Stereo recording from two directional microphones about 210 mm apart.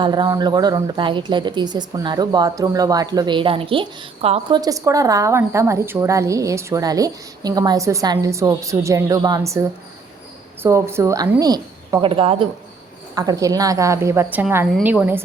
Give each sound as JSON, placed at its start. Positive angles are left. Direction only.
{"t": 0.0, "sound": "speech", "side_deg": -20}